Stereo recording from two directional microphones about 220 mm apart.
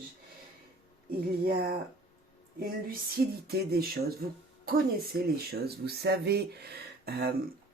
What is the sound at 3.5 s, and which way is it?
Speech, 45° right (ahead or behind).